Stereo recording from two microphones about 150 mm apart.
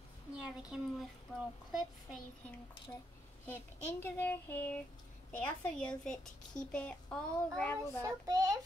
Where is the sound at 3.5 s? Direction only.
15° left (ahead or behind).